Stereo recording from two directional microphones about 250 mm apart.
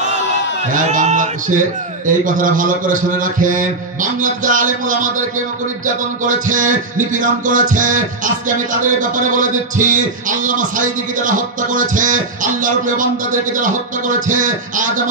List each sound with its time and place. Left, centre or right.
0.7 s a man's voice: right
6.2 s a man's voice: right